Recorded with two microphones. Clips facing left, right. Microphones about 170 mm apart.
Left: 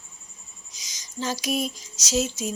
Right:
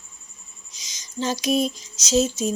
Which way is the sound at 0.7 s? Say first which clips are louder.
Right 4 dB; 25° right (ahead or behind).